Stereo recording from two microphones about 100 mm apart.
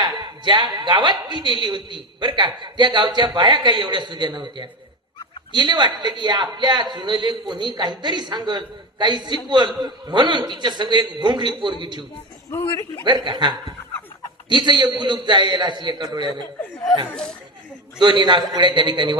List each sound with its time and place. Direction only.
0.0 s a man's voice: 50° right (ahead or behind)
13.1 s a man's voice: 50° right (ahead or behind)
18.0 s a man's voice: 50° right (ahead or behind)